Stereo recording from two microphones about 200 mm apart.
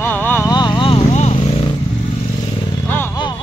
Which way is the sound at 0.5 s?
20° left (ahead or behind).